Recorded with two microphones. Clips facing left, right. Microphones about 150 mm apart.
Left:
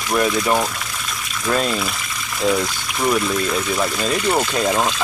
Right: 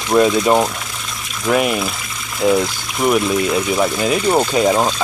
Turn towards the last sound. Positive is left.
turn(degrees=-20)  # may be behind; listen again after turning